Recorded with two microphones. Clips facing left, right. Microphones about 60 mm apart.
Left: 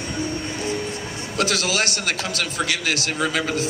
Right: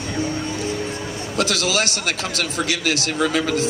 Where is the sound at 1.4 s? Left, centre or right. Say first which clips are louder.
Right 1 dB; left.